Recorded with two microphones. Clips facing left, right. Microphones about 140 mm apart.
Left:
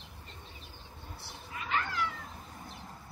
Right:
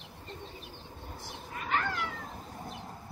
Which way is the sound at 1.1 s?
45° right (ahead or behind).